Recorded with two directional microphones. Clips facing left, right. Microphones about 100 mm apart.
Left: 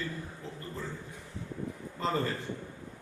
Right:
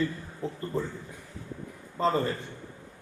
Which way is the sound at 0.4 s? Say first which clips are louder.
Right 9 dB; 35° right (ahead or behind).